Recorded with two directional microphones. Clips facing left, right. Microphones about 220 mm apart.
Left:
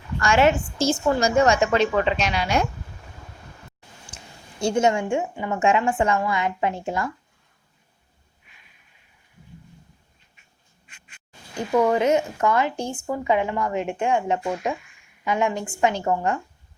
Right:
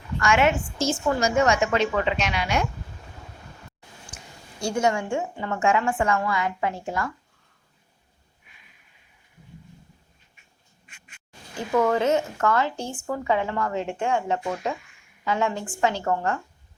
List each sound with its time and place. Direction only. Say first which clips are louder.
0.2 s a woman's voice: left 3 dB; 35° left (ahead or behind)
4.6 s a woman's voice: left 3 dB; 25° left (ahead or behind)
11.7 s speech: left 2 dB; 15° left (ahead or behind)